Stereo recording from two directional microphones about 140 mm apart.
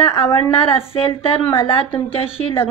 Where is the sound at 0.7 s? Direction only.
40° left (ahead or behind).